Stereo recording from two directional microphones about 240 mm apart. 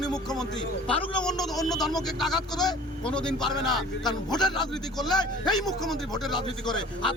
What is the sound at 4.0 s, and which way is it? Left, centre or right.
A man's voice, centre.